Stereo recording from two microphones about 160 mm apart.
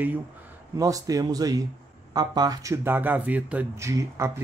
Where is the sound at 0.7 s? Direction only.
20° right (ahead or behind).